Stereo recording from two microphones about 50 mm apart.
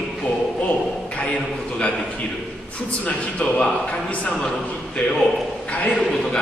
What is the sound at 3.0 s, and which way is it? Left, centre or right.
A man's voice, left.